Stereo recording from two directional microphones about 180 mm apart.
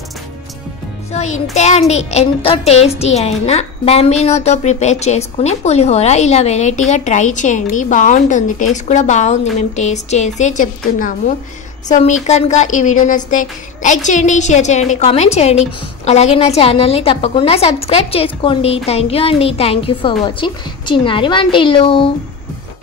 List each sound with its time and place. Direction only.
1.1 s a child's voice: 40° left (ahead or behind)